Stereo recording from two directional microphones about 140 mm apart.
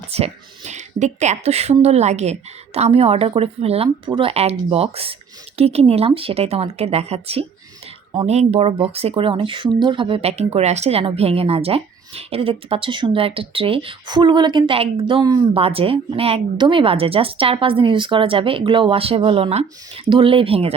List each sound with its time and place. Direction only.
0.1 s speech: 50° right (ahead or behind); by 15.4 s 30° right (ahead or behind)
15.5 s speech: 40° right (ahead or behind)